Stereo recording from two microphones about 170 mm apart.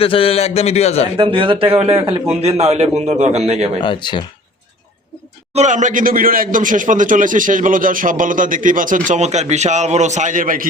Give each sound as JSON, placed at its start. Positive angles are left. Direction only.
{"t": 0.0, "sound": "a man's voice", "side_deg": 35}
{"t": 1.1, "sound": "a man's voice", "side_deg": -30}
{"t": 3.8, "sound": "speech", "side_deg": 25}
{"t": 5.5, "sound": "speech", "side_deg": -45}